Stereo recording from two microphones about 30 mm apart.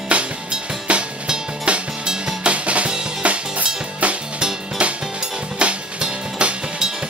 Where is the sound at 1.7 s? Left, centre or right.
Right.